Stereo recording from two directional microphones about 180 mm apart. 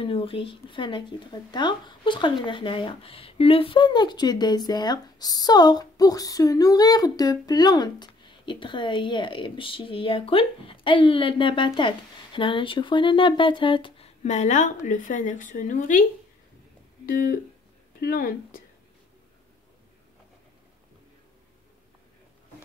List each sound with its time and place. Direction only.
0.0 s speech: 30° left (ahead or behind); by 18.6 s 50° left (ahead or behind)